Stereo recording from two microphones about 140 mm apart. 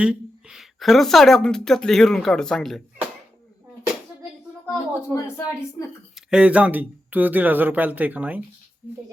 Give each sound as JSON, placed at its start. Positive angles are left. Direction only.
{"t": 0.0, "sound": "speech", "side_deg": -5}
{"t": 4.9, "sound": "speech", "side_deg": 20}
{"t": 6.1, "sound": "speech", "side_deg": -5}